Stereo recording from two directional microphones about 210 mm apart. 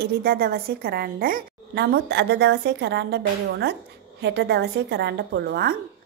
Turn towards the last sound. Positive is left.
turn(degrees=-50)  # may be behind; listen again after turning